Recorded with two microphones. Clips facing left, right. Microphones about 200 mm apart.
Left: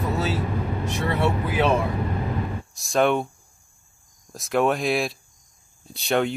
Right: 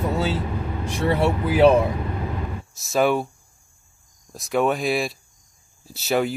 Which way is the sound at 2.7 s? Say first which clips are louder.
Right 1 dB; centre (ahead or behind).